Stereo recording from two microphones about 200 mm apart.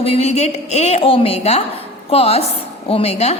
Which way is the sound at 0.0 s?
30° left (ahead or behind).